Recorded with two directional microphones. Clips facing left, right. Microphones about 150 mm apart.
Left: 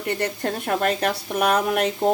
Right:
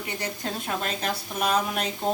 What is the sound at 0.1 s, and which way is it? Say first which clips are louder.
Speech: left 8 dB; 60° left (ahead or behind).